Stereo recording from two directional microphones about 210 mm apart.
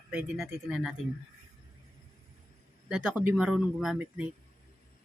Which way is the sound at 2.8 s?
5° right (ahead or behind).